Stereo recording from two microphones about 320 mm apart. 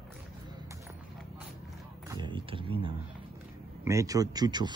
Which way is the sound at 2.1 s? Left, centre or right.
Centre.